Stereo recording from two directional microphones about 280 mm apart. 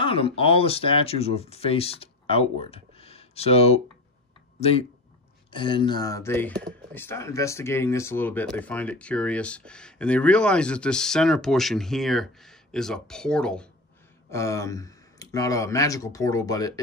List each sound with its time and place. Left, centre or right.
0.0 s speech: centre